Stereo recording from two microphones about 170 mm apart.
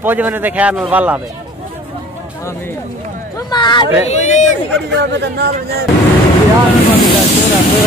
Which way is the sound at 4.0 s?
40° left (ahead or behind).